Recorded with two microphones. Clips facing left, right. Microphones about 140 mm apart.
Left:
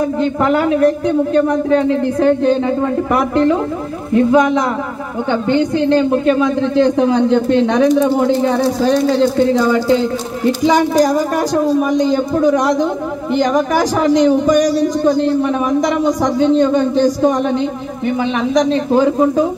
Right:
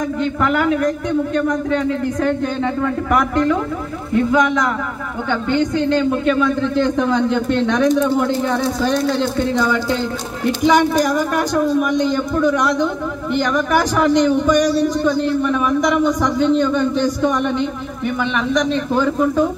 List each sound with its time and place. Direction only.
0.2 s a man's voice: 35° left (ahead or behind)
5.8 s a man's voice: 30° left (ahead or behind)
19.0 s speech: 25° left (ahead or behind)